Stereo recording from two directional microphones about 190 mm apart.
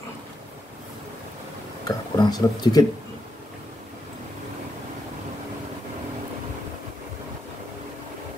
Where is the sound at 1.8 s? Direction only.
20° left (ahead or behind).